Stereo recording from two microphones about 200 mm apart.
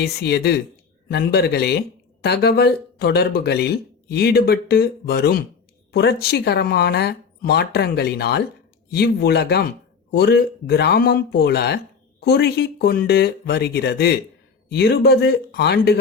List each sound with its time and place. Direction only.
0.0 s speech: 55° left (ahead or behind)